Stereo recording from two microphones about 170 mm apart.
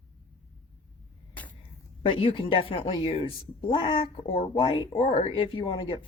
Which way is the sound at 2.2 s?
30° left (ahead or behind).